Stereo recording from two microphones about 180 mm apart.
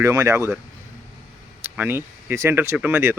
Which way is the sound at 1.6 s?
15° right (ahead or behind).